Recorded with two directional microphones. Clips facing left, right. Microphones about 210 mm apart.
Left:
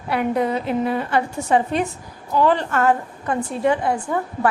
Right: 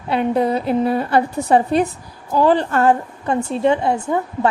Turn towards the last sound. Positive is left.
turn(degrees=-25)  # may be behind; listen again after turning